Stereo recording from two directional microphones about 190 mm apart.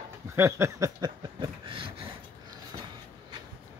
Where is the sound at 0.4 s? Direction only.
15° right (ahead or behind).